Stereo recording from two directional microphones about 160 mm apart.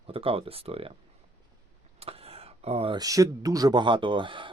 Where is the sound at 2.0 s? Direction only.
40° right (ahead or behind).